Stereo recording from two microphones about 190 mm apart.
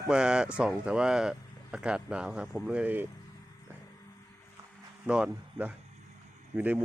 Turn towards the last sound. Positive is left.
turn(degrees=-10)  # may be behind; listen again after turning